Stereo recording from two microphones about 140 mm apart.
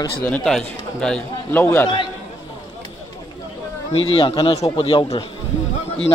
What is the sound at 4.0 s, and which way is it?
A man's voice, 40° left (ahead or behind).